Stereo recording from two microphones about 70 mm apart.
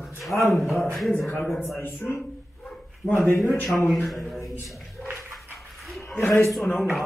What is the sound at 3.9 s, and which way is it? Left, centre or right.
Speech, centre.